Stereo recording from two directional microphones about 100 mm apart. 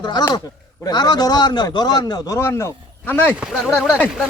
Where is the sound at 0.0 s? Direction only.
45° left (ahead or behind); by 3.3 s 20° left (ahead or behind).